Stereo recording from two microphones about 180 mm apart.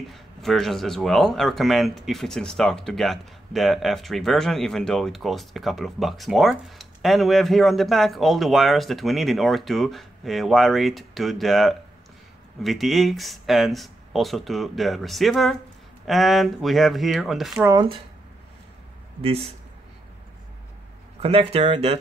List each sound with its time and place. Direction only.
0.1 s speech: centre (ahead or behind)
17.6 s speech: 15° right (ahead or behind)
19.2 s speech: 30° right (ahead or behind)
21.2 s speech: 30° right (ahead or behind)